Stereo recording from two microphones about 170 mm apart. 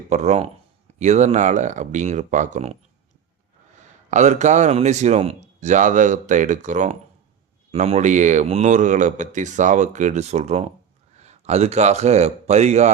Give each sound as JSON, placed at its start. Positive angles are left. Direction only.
{"t": 0.1, "sound": "speech", "side_deg": -40}
{"t": 3.8, "sound": "a man's voice", "side_deg": -45}